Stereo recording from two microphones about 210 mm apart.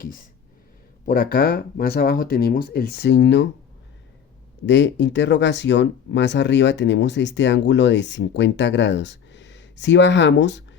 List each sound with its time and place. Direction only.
1.0 s speech: 45° left (ahead or behind)
4.6 s speech: 55° left (ahead or behind)